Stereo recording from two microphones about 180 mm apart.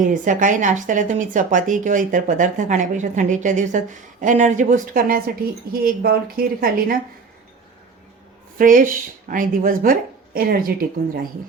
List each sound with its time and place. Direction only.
0.0 s speech: 45° right (ahead or behind)
8.5 s speech: 50° right (ahead or behind)